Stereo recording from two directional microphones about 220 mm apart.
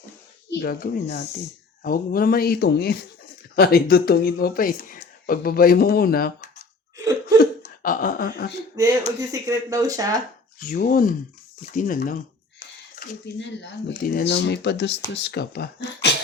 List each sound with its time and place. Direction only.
0.5 s speech: 45° left (ahead or behind)
6.9 s cough: 15° right (ahead or behind)
7.3 s hiccup: 40° left (ahead or behind)
8.7 s speech: 15° right (ahead or behind)
10.6 s speech: 40° left (ahead or behind)
13.0 s speech: 50° left (ahead or behind)